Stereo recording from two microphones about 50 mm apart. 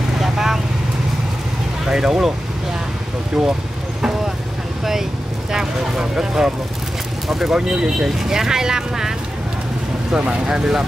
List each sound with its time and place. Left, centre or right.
0.2 s vehicle: centre
1.9 s speech: centre
3.4 s speech: centre
5.5 s speech: centre
10.1 s speech: centre